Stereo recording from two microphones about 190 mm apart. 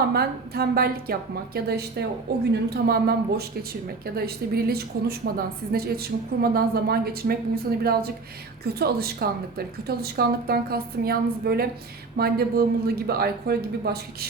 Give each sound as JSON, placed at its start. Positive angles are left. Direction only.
{"t": 0.1, "sound": "speech", "side_deg": -55}
{"t": 4.5, "sound": "a woman's voice", "side_deg": -55}